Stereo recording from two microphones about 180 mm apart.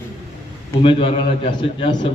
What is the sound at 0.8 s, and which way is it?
A man's voice, 30° left (ahead or behind).